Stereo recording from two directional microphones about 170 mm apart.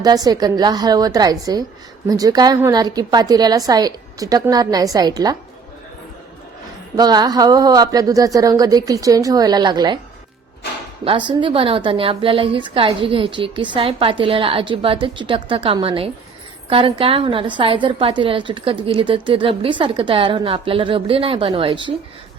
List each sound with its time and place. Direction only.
0.0 s a woman's voice: 25° right (ahead or behind)
6.9 s a woman's voice: 25° right (ahead or behind)
11.0 s a woman's voice: 30° right (ahead or behind)